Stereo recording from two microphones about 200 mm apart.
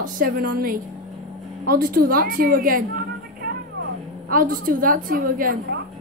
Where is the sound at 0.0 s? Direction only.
50° right (ahead or behind).